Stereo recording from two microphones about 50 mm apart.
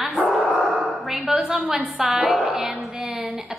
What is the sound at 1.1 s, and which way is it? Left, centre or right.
A woman's voice, centre.